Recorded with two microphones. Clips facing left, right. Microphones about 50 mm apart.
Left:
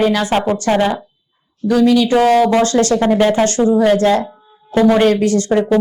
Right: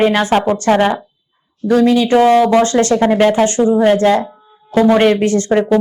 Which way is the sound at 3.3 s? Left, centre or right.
Right.